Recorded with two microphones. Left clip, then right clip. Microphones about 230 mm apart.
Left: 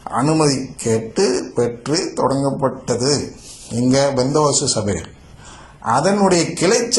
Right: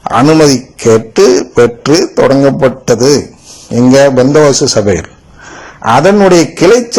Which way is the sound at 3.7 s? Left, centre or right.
Right.